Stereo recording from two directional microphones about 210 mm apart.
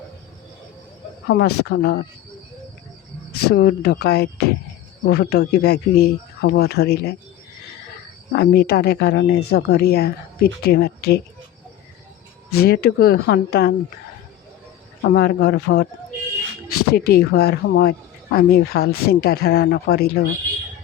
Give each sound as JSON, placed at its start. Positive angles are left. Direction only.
{"t": 1.3, "sound": "speech", "side_deg": 50}
{"t": 3.3, "sound": "speech", "side_deg": 50}
{"t": 8.3, "sound": "speech", "side_deg": 50}
{"t": 12.5, "sound": "speech", "side_deg": 50}
{"t": 15.1, "sound": "speech", "side_deg": 50}
{"t": 16.9, "sound": "speech", "side_deg": 50}